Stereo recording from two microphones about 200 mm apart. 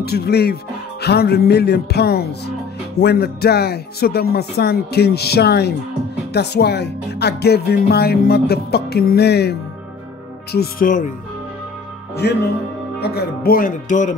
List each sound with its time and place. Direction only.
0.0 s speech: 50° left (ahead or behind)
12.2 s speech: 55° left (ahead or behind); by 14.1 s 40° left (ahead or behind)